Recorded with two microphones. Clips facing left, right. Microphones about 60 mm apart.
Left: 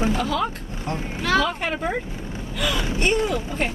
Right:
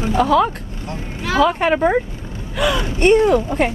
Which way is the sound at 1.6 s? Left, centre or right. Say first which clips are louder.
Right 10 dB; right.